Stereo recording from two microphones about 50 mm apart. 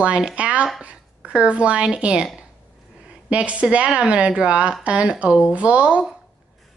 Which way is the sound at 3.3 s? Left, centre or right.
Right.